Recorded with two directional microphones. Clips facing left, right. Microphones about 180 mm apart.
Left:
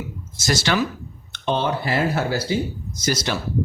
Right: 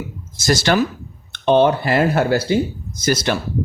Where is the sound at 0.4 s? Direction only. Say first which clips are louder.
Right 5 dB; 45° right (ahead or behind).